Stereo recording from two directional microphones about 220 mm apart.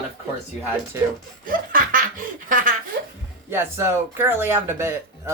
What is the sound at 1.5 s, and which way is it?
Speech, 40° right (ahead or behind).